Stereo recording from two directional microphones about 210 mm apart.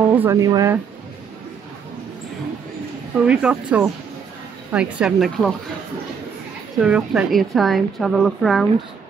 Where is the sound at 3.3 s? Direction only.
5° right (ahead or behind).